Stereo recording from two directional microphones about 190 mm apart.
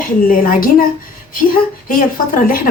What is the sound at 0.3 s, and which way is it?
Speech, 50° left (ahead or behind).